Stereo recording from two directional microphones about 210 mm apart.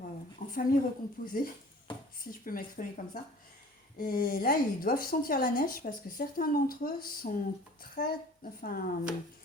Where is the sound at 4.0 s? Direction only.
40° left (ahead or behind).